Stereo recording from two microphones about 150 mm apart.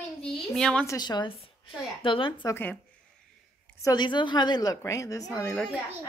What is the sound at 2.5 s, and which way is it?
Speech, 15° left (ahead or behind).